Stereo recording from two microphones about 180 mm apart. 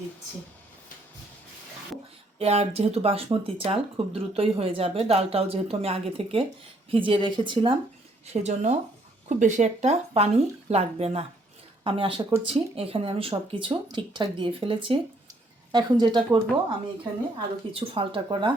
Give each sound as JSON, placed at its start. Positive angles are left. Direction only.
{"t": 2.4, "sound": "speech", "side_deg": -35}
{"t": 8.3, "sound": "speech", "side_deg": -40}